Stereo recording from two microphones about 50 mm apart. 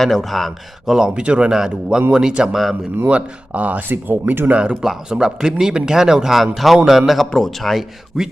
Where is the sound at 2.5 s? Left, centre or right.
Centre.